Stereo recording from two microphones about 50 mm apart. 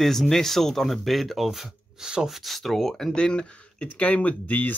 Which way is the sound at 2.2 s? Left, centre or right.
Centre.